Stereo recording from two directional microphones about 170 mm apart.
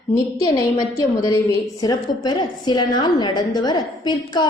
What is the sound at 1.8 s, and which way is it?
A woman's voice, 25° left (ahead or behind).